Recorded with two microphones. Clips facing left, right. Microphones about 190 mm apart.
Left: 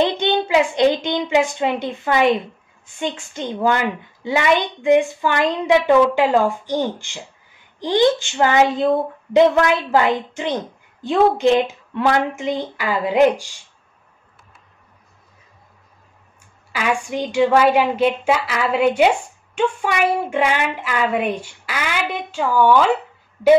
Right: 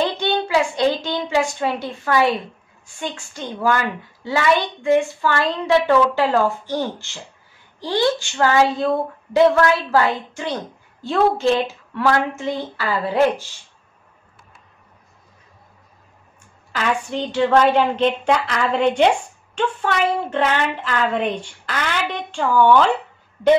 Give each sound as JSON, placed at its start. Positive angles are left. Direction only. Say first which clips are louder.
{"t": 0.0, "sound": "a woman's voice", "louder": "left 3 dB", "side_deg": 20}
{"t": 16.7, "sound": "a woman's voice", "louder": "left 1 dB", "side_deg": 10}